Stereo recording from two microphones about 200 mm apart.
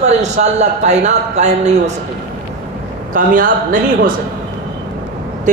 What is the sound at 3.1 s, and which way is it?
A man's voice, 40° right (ahead or behind).